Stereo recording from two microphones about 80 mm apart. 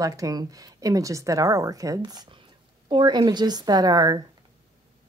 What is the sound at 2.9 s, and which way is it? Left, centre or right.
A woman's voice, right.